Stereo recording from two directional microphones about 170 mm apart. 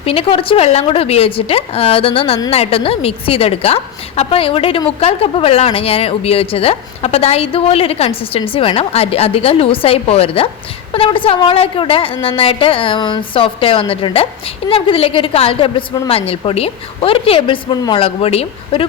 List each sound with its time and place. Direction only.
0.0 s a woman's voice: 35° left (ahead or behind)